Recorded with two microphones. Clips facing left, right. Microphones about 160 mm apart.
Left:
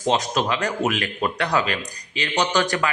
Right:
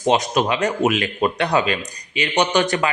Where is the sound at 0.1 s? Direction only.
20° right (ahead or behind).